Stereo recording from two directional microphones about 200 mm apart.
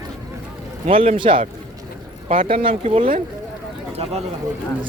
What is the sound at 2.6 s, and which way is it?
Speech, 25° right (ahead or behind).